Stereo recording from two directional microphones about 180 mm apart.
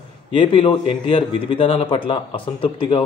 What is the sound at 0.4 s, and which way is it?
Speech, 30° left (ahead or behind).